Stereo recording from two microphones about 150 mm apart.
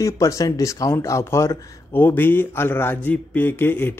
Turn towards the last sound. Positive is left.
turn(degrees=15)  # may be behind; listen again after turning